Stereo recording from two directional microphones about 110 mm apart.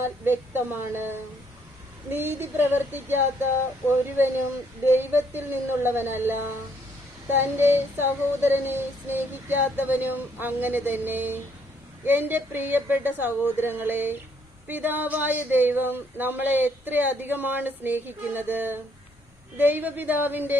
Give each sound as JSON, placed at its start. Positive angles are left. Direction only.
{"t": 0.0, "sound": "female singing", "side_deg": -20}
{"t": 4.9, "sound": "female singing", "side_deg": -20}
{"t": 12.0, "sound": "speech", "side_deg": -20}